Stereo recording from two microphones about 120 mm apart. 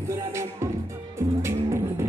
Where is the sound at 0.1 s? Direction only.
25° right (ahead or behind).